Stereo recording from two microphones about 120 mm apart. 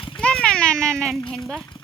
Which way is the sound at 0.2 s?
10° left (ahead or behind).